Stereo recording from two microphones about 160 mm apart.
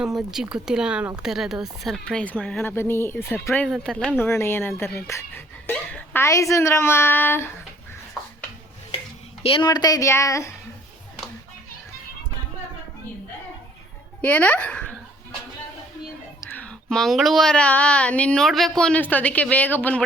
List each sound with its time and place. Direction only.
0.0 s speech: 5° right (ahead or behind)
4.2 s speech: 15° left (ahead or behind)
9.4 s speech: 35° left (ahead or behind)
14.2 s speech: 10° left (ahead or behind)
16.4 s speech: 10° left (ahead or behind)